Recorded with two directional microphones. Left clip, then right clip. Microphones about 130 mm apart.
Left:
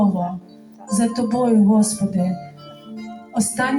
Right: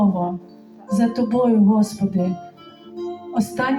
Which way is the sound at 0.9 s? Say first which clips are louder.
Right 1 dB; 25° right (ahead or behind).